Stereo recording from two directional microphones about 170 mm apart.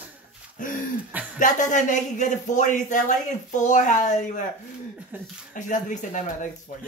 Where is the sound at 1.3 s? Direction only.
50° left (ahead or behind).